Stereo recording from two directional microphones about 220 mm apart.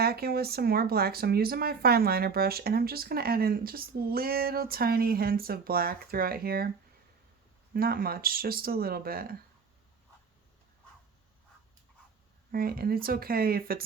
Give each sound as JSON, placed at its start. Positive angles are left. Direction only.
{"t": 0.0, "sound": "speech", "side_deg": -45}
{"t": 7.7, "sound": "speech", "side_deg": -45}
{"t": 12.5, "sound": "speech", "side_deg": -40}